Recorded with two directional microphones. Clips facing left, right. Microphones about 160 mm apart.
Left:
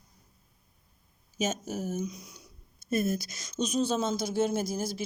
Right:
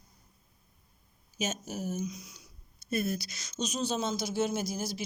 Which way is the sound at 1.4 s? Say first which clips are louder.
Left 4 dB; 45° left (ahead or behind).